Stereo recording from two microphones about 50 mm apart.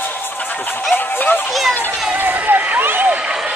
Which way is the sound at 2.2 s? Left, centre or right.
Right.